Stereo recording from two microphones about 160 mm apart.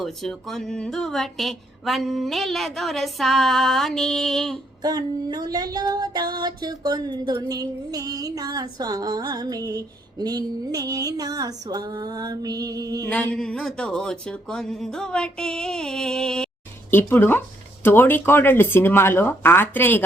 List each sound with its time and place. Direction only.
0.0 s a woman's voice: centre (ahead or behind)
4.8 s music: 25° right (ahead or behind)
13.1 s a woman's voice: 10° left (ahead or behind)